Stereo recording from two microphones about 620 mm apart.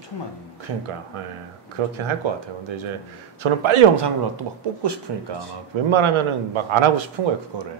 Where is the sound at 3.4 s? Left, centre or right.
Right.